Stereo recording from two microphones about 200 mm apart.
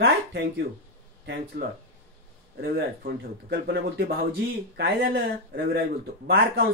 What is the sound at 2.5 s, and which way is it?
A man's voice, 55° right (ahead or behind).